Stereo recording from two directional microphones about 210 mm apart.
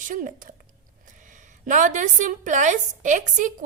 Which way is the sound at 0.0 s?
40° right (ahead or behind).